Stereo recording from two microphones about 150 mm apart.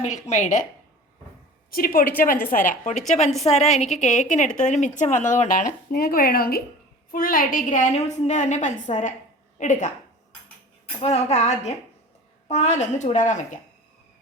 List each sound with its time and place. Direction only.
0.0 s a woman's voice: 50° left (ahead or behind)
1.7 s a woman's voice: 80° left
7.1 s a woman's voice: 70° left (ahead or behind)
11.0 s a woman's voice: 45° left (ahead or behind)